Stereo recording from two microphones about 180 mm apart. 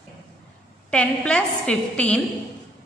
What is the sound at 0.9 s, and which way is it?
A woman's voice, 5° left (ahead or behind).